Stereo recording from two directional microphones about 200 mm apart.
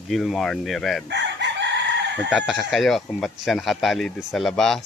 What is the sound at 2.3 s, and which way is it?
Speech, centre (ahead or behind).